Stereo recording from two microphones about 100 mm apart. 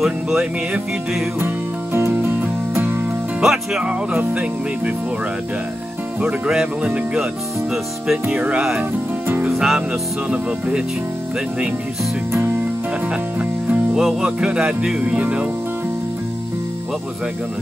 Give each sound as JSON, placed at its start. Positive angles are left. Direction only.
{"t": 0.0, "sound": "music", "side_deg": -5}
{"t": 1.4, "sound": "music", "side_deg": -25}
{"t": 3.3, "sound": "speech", "side_deg": -5}
{"t": 6.2, "sound": "speech", "side_deg": -10}
{"t": 9.3, "sound": "music", "side_deg": -20}
{"t": 9.6, "sound": "music", "side_deg": -5}
{"t": 13.4, "sound": "speech", "side_deg": -10}